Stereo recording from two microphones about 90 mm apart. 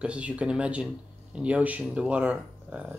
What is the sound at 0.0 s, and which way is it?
Speech, 15° right (ahead or behind).